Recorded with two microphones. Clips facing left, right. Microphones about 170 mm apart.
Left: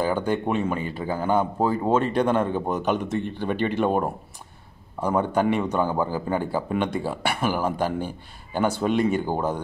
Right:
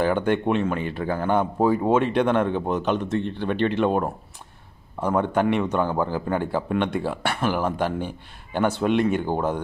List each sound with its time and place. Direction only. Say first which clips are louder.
0.5 s speech: right 2 dB; 5° left (ahead or behind)